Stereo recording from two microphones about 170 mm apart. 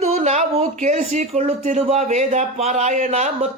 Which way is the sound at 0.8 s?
45° right (ahead or behind).